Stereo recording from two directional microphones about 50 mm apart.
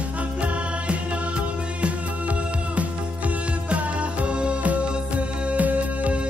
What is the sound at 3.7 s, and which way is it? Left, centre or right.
Music, right.